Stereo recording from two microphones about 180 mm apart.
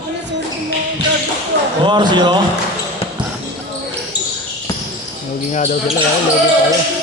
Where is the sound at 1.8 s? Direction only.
25° right (ahead or behind).